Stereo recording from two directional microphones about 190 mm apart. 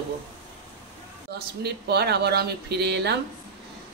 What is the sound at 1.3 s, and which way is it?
Speech, 60° right (ahead or behind).